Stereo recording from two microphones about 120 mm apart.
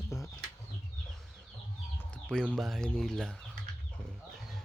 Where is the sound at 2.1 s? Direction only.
5° left (ahead or behind).